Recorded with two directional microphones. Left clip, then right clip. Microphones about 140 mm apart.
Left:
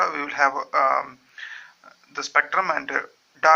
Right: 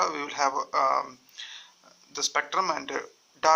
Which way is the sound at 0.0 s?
45° right (ahead or behind).